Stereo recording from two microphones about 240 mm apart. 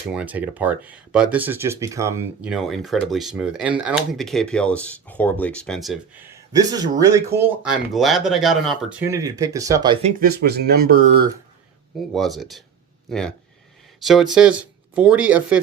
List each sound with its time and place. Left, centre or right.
0.1 s speech: centre
6.3 s speech: centre
9.0 s speech: centre
10.2 s speech: right
11.9 s speech: centre